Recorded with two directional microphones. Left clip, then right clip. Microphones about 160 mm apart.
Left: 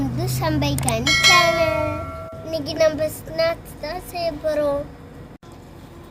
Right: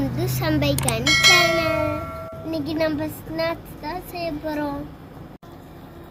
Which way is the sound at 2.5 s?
30° left (ahead or behind).